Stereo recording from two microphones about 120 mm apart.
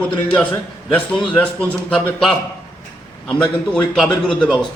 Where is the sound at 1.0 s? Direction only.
10° left (ahead or behind).